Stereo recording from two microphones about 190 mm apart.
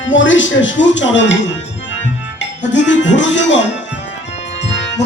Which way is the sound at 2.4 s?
70° left (ahead or behind).